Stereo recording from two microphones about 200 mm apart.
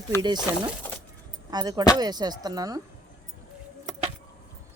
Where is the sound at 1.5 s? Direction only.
20° right (ahead or behind).